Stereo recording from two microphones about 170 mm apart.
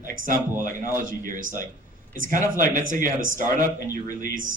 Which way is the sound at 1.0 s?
55° right (ahead or behind).